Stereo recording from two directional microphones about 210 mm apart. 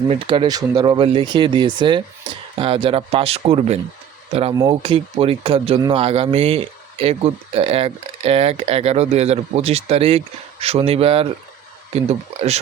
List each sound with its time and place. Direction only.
0.1 s speech: 25° right (ahead or behind)